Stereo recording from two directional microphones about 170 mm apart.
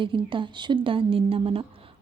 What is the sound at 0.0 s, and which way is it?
A woman's voice, 30° right (ahead or behind).